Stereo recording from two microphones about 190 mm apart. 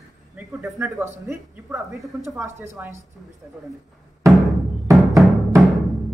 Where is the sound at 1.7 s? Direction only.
Centre (ahead or behind).